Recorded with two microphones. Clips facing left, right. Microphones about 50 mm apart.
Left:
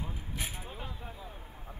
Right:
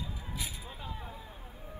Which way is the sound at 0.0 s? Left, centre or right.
Left.